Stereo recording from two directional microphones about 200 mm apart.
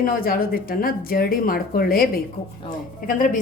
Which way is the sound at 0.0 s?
45° left (ahead or behind).